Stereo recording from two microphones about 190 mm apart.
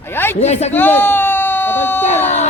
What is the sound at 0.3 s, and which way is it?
Speech, 35° left (ahead or behind).